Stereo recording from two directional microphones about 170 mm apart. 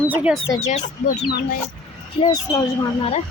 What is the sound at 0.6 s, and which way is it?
Speech, 45° left (ahead or behind).